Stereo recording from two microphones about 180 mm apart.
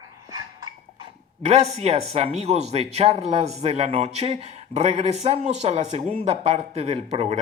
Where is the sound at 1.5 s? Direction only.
35° right (ahead or behind).